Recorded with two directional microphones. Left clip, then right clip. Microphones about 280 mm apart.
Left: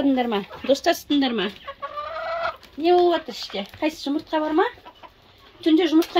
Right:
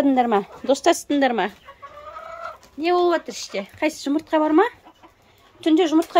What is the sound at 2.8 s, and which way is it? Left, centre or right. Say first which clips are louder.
Speech: left 1 dB; centre.